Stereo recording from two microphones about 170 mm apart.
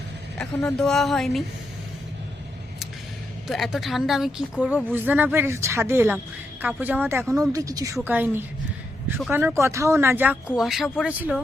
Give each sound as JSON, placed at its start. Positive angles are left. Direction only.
{"t": 0.3, "sound": "a woman's voice", "side_deg": 5}
{"t": 3.4, "sound": "a woman's voice", "side_deg": 0}